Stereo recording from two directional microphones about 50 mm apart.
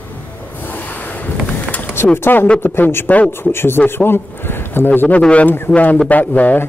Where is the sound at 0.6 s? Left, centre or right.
Left.